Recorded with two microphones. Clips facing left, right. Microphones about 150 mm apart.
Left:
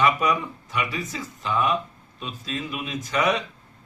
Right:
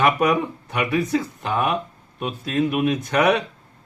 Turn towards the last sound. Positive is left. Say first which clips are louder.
# right 5 dB
turn(degrees=-60)  # may be behind; listen again after turning